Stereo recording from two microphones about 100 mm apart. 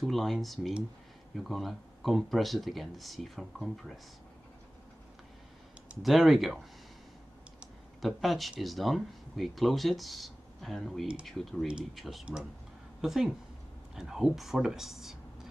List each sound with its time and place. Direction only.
0.0 s speech: centre (ahead or behind)
6.0 s speech: centre (ahead or behind)
8.0 s speech: centre (ahead or behind)